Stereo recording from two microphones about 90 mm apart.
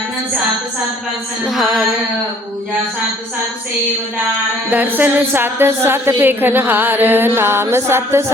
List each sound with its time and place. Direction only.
1.5 s music: 5° right (ahead or behind)
4.7 s a woman's voice: 20° right (ahead or behind)